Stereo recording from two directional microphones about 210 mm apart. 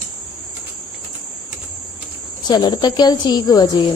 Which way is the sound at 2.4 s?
20° left (ahead or behind).